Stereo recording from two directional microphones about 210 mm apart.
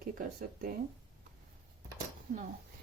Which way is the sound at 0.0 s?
40° right (ahead or behind).